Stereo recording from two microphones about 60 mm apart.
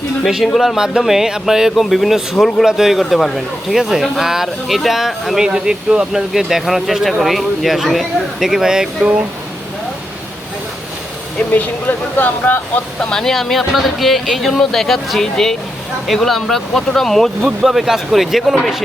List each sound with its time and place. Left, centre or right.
0.4 s speech: centre
0.8 s speech: centre
3.0 s speech: centre
5.5 s speech: centre
11.3 s speech: left
13.0 s speech: centre
17.6 s speech: centre